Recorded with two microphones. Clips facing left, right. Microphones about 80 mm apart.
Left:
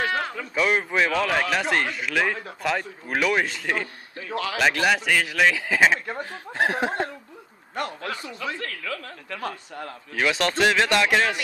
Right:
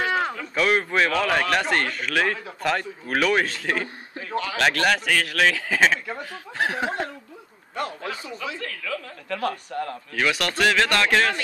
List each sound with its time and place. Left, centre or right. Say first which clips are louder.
0.6 s speech: right 1 dB; centre
6.3 s speech: left 2 dB; left
7.7 s speech: even; left
9.3 s speech: right 6 dB; centre
10.1 s speech: left 1 dB; left